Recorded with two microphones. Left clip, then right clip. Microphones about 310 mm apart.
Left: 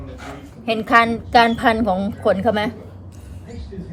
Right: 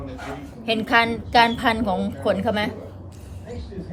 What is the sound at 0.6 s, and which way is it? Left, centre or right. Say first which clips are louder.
A woman's voice: left 4 dB; centre.